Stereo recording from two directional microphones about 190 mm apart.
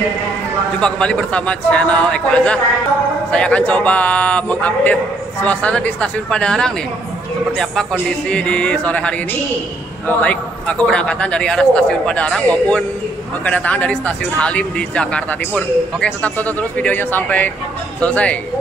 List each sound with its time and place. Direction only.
0.7 s a man's voice: 5° left (ahead or behind)